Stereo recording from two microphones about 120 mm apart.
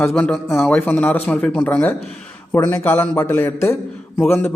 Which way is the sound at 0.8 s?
15° left (ahead or behind).